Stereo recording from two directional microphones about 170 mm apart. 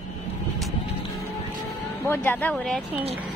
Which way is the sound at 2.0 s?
10° left (ahead or behind).